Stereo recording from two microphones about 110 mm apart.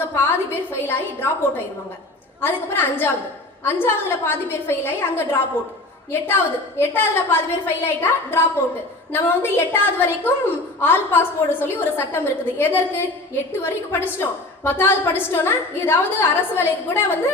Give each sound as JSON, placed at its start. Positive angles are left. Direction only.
{"t": 0.1, "sound": "a woman's voice", "side_deg": 20}